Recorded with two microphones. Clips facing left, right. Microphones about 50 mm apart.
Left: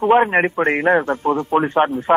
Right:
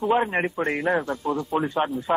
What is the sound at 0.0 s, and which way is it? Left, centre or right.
A man's voice, left.